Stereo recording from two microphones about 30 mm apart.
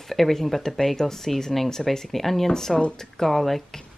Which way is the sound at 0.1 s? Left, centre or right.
Centre.